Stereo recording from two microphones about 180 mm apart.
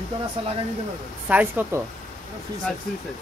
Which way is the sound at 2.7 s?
5° left (ahead or behind).